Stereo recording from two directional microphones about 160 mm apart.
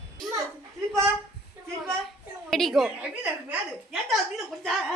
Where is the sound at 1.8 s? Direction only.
Centre (ahead or behind).